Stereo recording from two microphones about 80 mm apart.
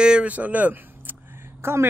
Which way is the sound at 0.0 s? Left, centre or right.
Centre.